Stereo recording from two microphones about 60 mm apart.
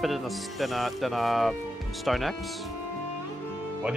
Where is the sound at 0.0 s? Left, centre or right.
Centre.